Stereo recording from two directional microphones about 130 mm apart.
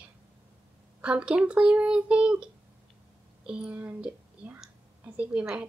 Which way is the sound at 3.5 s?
10° right (ahead or behind).